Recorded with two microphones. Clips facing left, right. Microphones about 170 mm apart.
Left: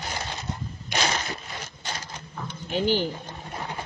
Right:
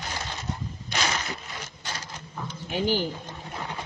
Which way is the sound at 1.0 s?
30° left (ahead or behind).